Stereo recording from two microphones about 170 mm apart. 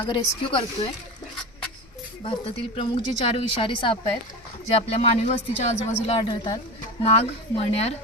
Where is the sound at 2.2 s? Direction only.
30° left (ahead or behind).